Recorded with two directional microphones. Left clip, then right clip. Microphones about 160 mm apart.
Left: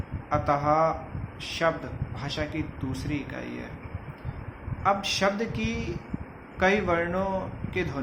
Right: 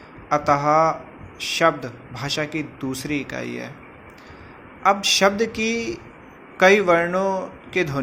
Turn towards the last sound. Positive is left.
turn(degrees=-30)  # may be behind; listen again after turning